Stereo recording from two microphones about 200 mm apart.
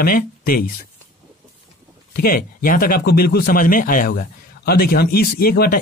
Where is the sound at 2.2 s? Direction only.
45° left (ahead or behind).